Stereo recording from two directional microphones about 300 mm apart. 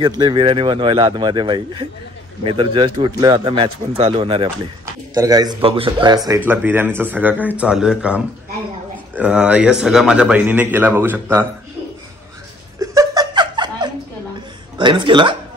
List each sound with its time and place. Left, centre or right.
0.2 s a man's voice: centre
12.8 s laughter: centre
14.8 s speech: centre